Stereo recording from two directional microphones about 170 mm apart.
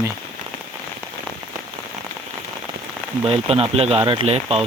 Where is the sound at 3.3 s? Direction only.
35° right (ahead or behind).